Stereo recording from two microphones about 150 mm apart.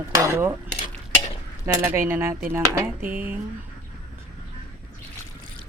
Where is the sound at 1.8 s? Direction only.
15° right (ahead or behind).